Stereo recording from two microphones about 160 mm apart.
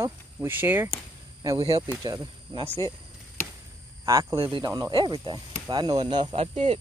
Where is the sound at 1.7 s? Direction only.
20° right (ahead or behind).